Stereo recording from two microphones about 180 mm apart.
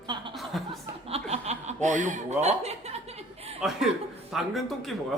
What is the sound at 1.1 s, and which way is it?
Chuckle, 35° right (ahead or behind).